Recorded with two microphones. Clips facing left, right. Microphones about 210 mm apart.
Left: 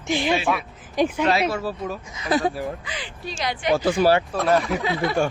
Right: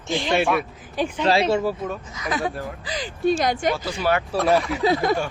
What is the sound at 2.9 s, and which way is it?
Speech, 45° right (ahead or behind).